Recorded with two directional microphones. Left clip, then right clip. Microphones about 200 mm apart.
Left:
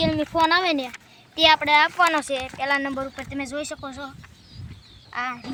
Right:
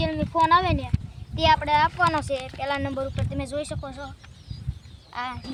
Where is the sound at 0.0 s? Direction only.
65° left (ahead or behind).